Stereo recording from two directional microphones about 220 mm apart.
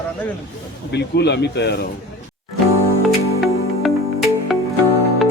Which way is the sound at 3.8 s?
Centre (ahead or behind).